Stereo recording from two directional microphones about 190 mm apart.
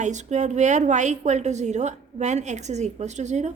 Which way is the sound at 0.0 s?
40° right (ahead or behind).